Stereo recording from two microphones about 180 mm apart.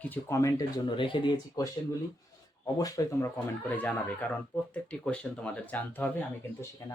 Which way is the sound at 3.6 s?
10° left (ahead or behind).